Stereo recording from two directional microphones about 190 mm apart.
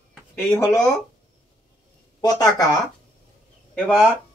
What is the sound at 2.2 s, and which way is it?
Speech, 20° left (ahead or behind).